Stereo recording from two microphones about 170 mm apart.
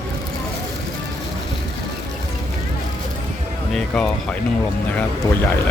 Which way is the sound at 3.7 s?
5° left (ahead or behind).